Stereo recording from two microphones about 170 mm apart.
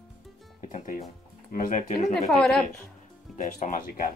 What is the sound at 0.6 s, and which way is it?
Music, 45° left (ahead or behind).